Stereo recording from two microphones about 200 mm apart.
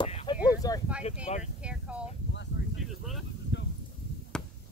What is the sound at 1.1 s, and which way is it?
Speech, 30° left (ahead or behind).